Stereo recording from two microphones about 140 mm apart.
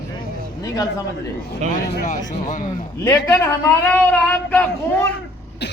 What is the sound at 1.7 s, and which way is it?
Speech, 65° left (ahead or behind).